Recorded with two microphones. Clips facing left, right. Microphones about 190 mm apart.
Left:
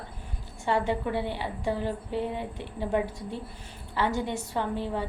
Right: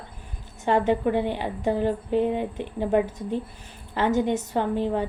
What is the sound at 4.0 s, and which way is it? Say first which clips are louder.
Speech: right 6 dB; 20° right (ahead or behind).